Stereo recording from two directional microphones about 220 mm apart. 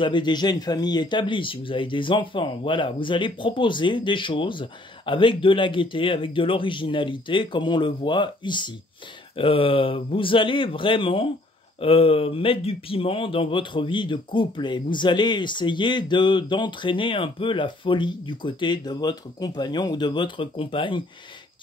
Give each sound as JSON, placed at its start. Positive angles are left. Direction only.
{"t": 0.0, "sound": "speech", "side_deg": 20}